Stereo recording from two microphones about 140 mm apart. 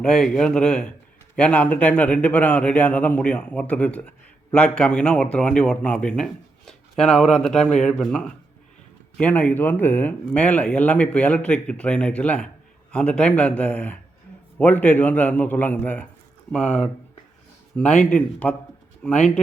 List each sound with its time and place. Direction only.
0.0 s speech: 5° left (ahead or behind)